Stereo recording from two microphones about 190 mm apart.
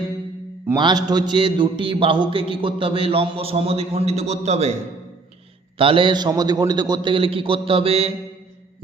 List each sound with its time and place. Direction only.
0.8 s a man's voice: 20° right (ahead or behind)
5.7 s a man's voice: 25° right (ahead or behind)